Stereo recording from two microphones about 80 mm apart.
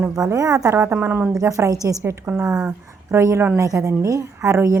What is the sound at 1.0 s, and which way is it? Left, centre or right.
Speech, right.